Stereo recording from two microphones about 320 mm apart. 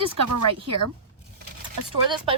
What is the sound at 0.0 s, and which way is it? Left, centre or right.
Speech, right.